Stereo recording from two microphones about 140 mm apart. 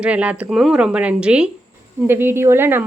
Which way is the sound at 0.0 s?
10° right (ahead or behind).